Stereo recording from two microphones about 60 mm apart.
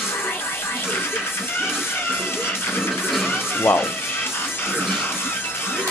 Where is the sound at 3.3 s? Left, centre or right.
Left.